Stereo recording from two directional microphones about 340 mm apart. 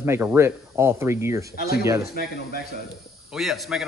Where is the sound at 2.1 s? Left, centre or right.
Left.